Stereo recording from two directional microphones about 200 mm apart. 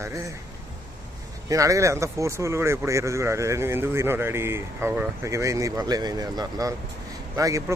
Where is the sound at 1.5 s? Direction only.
15° right (ahead or behind).